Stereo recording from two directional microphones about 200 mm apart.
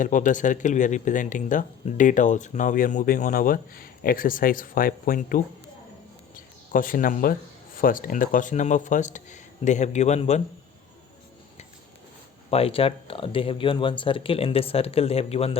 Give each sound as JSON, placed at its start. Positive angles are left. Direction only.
{"t": 0.0, "sound": "speech", "side_deg": 40}
{"t": 12.5, "sound": "speech", "side_deg": 30}